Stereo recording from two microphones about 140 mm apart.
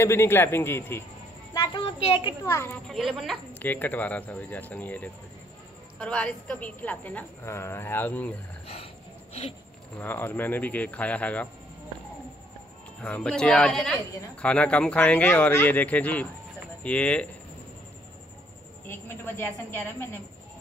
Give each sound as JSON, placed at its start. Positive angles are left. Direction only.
{"t": 0.0, "sound": "a woman's voice", "side_deg": 20}
{"t": 1.5, "sound": "child singing", "side_deg": 25}
{"t": 1.8, "sound": "a woman's voice", "side_deg": 45}
{"t": 2.4, "sound": "a woman's voice", "side_deg": 20}
{"t": 2.9, "sound": "speech", "side_deg": 0}
{"t": 3.5, "sound": "a woman's voice", "side_deg": 10}
{"t": 8.6, "sound": "a sound", "side_deg": 45}
{"t": 9.9, "sound": "a woman's voice", "side_deg": 15}
{"t": 13.0, "sound": "a woman's voice", "side_deg": 5}
{"t": 18.9, "sound": "a woman's voice", "side_deg": 15}